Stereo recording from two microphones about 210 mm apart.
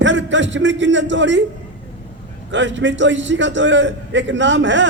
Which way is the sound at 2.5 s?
60° right (ahead or behind).